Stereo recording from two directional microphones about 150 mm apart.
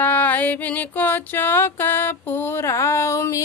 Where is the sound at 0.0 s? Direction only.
10° left (ahead or behind).